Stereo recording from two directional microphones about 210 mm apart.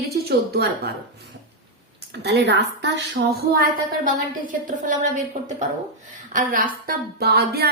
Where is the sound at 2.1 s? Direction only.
55° right (ahead or behind).